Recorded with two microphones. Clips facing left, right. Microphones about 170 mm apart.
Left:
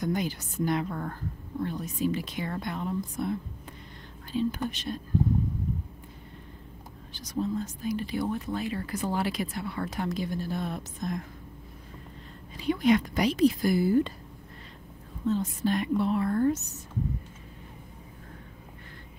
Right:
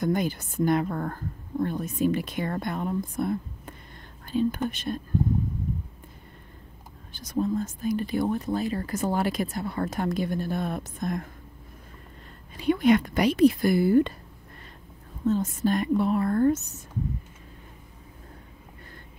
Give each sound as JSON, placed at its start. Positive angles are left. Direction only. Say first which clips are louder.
{"t": 0.0, "sound": "speech", "louder": "right 4 dB", "side_deg": -50}
{"t": 7.1, "sound": "speech", "louder": "right 4 dB", "side_deg": -50}
{"t": 12.5, "sound": "speech", "louder": "right 3 dB", "side_deg": -55}
{"t": 15.2, "sound": "speech", "louder": "right 3 dB", "side_deg": -45}